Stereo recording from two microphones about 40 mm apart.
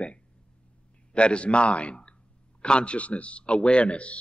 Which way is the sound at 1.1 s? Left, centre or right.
Left.